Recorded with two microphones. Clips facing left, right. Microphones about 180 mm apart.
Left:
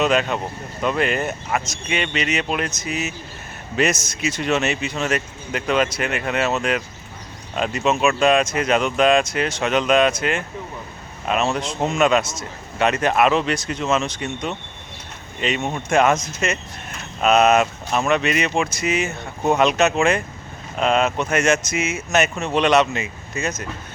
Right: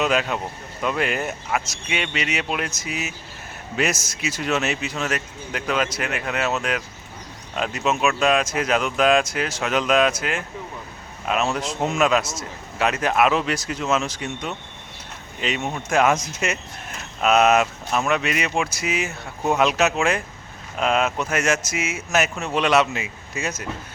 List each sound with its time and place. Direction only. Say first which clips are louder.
0.0 s speech: left 3 dB; 5° right (ahead or behind)
12.2 s a man's voice: even; 25° right (ahead or behind)
12.8 s speech: left 2 dB; 5° right (ahead or behind)